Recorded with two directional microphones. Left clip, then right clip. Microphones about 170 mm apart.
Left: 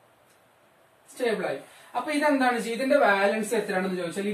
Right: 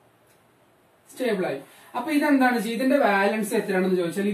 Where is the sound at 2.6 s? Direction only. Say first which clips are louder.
Even; 15° left (ahead or behind).